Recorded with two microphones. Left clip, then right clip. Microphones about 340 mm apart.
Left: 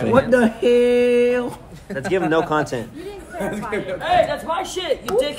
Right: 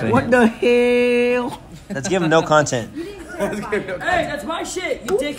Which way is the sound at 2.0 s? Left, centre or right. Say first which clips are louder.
Right 2 dB; centre.